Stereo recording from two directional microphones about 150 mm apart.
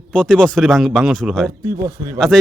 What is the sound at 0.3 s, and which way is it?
Speech, centre (ahead or behind).